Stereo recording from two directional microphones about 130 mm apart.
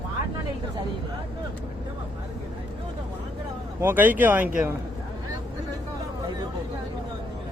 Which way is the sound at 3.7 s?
15° right (ahead or behind).